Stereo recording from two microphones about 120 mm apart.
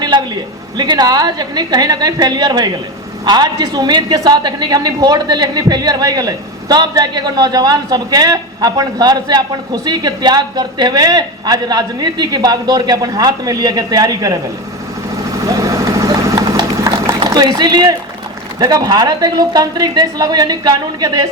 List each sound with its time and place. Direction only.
0.8 s a woman's voice: 35° right (ahead or behind)
15.4 s vehicle: 30° right (ahead or behind)
17.2 s a woman's voice: 35° right (ahead or behind)